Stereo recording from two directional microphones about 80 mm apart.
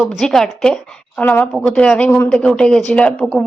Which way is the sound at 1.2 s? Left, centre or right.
Centre.